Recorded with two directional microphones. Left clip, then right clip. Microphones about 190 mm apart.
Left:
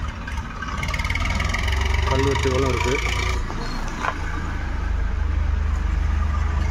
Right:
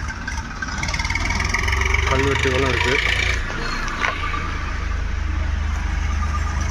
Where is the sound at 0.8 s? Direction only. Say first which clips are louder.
Right 3 dB; 90° left.